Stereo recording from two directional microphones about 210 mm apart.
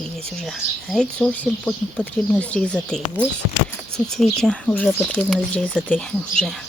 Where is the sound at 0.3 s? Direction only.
Centre (ahead or behind).